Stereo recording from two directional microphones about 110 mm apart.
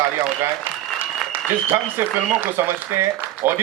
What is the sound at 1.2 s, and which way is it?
Applause, centre (ahead or behind).